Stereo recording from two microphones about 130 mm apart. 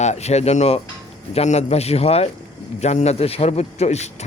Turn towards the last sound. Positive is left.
turn(degrees=60)  # may be behind; listen again after turning